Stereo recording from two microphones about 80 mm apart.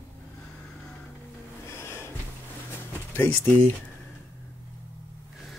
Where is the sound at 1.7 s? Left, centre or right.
Left.